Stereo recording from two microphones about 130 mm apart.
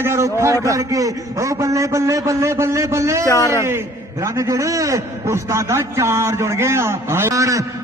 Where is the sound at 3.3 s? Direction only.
25° left (ahead or behind).